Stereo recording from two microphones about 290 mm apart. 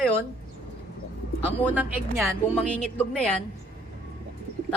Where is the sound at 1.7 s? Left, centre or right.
Centre.